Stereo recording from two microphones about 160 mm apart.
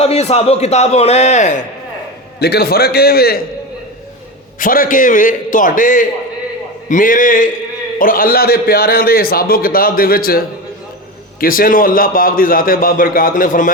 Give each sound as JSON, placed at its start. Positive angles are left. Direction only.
{"t": 0.0, "sound": "a man's voice", "side_deg": 40}
{"t": 2.4, "sound": "a man's voice", "side_deg": 85}
{"t": 4.6, "sound": "a man's voice", "side_deg": 60}